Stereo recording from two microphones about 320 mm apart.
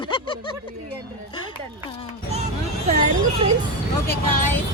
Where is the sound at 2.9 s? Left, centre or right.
Centre.